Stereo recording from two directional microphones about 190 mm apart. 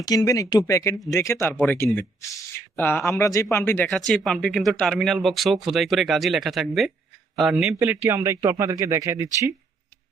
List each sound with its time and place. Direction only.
0.0 s a man's voice: 20° left (ahead or behind); by 9.5 s 15° right (ahead or behind)